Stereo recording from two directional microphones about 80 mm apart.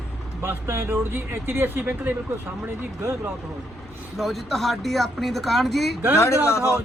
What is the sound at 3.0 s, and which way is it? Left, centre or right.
Speech, right.